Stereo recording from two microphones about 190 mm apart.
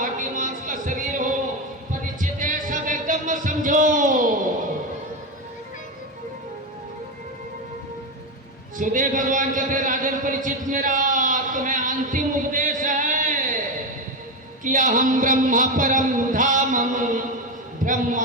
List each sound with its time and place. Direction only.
0.0 s music: 45° right (ahead or behind)
8.8 s a man's voice: 45° right (ahead or behind)
14.6 s a man's voice: 45° right (ahead or behind)